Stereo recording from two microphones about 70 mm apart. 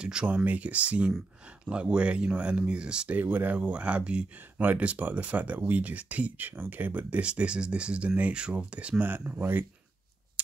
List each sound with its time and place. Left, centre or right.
0.0 s speech: centre
3.2 s speech: right